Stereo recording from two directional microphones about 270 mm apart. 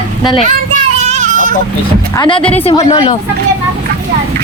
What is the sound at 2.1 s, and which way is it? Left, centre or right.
Speech, centre.